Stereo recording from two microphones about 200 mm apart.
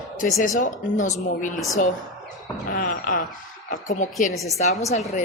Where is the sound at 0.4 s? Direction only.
40° left (ahead or behind).